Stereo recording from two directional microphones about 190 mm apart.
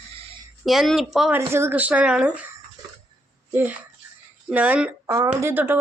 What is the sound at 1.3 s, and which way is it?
A woman's voice, 15° right (ahead or behind).